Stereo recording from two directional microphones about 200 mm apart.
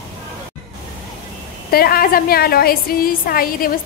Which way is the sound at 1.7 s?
50° left (ahead or behind).